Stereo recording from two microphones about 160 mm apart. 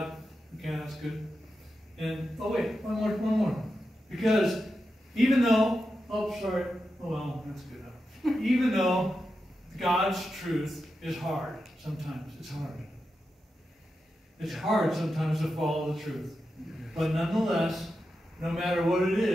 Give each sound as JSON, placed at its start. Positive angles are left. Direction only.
{"t": 0.0, "sound": "a sound", "side_deg": 0}
{"t": 2.0, "sound": "a man's voice", "side_deg": 0}
{"t": 14.4, "sound": "a man's voice", "side_deg": 0}